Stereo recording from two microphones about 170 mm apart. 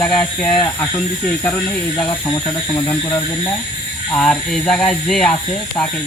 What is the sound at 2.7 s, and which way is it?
Speech, 20° left (ahead or behind).